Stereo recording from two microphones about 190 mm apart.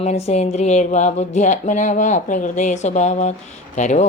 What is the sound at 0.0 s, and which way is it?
Speech, 35° left (ahead or behind).